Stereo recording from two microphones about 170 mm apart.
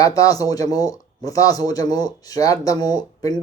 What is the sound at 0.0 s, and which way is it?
Speech, 20° left (ahead or behind).